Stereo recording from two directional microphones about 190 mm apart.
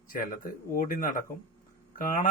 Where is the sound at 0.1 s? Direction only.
45° left (ahead or behind).